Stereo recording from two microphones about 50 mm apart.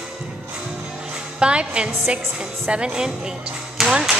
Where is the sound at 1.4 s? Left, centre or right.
Right.